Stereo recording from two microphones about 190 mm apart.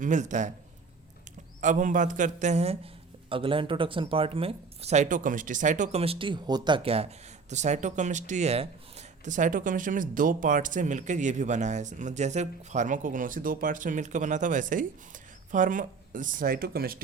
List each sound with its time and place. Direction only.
0.0 s a man's voice: 40° right (ahead or behind)
1.6 s a man's voice: 40° right (ahead or behind)